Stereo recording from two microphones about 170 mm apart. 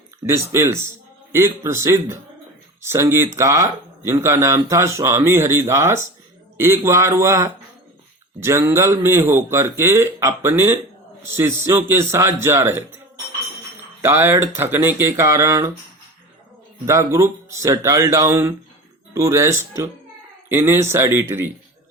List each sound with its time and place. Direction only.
0.3 s a man's voice: 15° right (ahead or behind)
14.0 s a man's voice: 15° right (ahead or behind)
16.8 s a man's voice: 15° right (ahead or behind)